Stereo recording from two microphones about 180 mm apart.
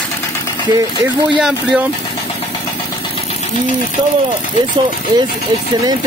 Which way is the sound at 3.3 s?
40° left (ahead or behind).